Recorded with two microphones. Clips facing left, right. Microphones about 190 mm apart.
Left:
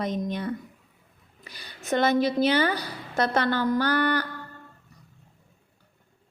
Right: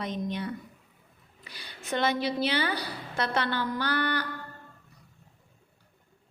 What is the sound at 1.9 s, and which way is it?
A woman's voice, 45° left (ahead or behind).